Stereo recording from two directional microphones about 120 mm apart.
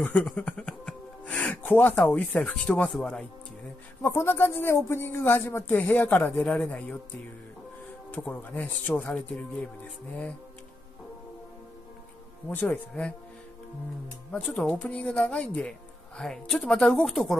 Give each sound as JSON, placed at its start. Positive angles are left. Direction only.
{"t": 0.0, "sound": "speech", "side_deg": 10}
{"t": 4.0, "sound": "a woman's voice", "side_deg": 20}
{"t": 8.1, "sound": "speech", "side_deg": 15}
{"t": 12.4, "sound": "speech", "side_deg": 15}
{"t": 14.3, "sound": "speech", "side_deg": 10}